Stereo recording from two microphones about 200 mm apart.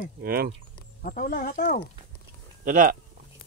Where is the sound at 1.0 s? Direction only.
45° left (ahead or behind).